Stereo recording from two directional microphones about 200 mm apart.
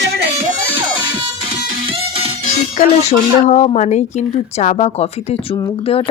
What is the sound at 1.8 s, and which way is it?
Music, 25° right (ahead or behind).